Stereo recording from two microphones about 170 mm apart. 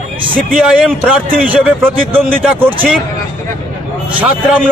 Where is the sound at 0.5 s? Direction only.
5° right (ahead or behind).